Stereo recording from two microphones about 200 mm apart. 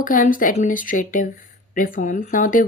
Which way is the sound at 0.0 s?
40° left (ahead or behind).